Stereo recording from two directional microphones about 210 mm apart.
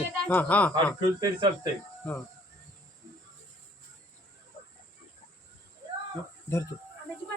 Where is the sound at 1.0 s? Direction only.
20° right (ahead or behind).